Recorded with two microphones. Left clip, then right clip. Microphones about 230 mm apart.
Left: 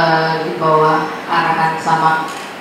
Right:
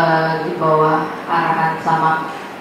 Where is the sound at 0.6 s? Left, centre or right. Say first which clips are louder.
Left 2 dB; right.